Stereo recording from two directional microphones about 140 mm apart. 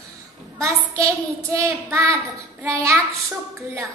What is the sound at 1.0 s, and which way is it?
Child singing, 20° right (ahead or behind).